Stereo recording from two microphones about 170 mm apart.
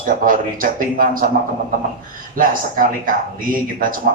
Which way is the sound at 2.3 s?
55° right (ahead or behind).